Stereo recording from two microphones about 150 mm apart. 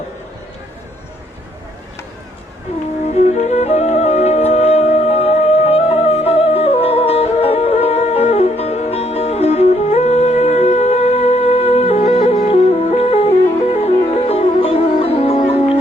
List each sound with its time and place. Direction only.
3.2 s music: 50° left (ahead or behind)